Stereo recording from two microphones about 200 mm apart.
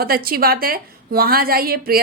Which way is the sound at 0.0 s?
50° right (ahead or behind).